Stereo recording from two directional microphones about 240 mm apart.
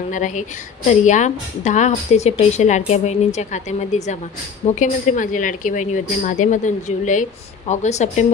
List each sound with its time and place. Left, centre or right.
0.1 s a woman's voice: left